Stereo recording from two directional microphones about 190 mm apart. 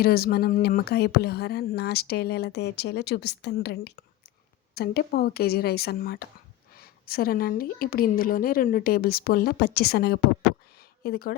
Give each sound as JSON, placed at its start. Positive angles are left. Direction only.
{"t": 0.0, "sound": "a woman's voice", "side_deg": 55}